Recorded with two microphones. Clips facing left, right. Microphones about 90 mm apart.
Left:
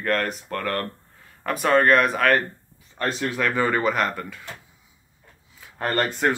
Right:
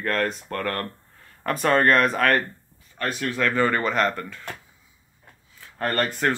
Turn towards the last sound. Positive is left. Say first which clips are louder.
# left 1 dB
turn(degrees=20)  # may be behind; listen again after turning